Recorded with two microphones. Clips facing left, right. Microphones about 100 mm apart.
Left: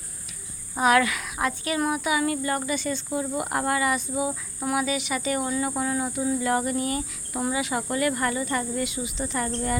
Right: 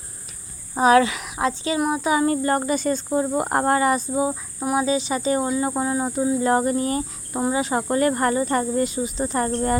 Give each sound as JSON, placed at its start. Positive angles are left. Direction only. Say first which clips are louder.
{"t": 0.8, "sound": "speech", "louder": "right 5 dB", "side_deg": -30}